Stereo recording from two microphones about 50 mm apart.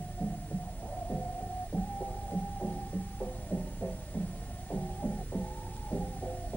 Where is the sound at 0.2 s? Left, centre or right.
Left.